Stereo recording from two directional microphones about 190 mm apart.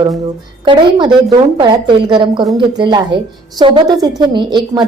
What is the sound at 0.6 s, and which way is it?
A woman's voice, 25° right (ahead or behind).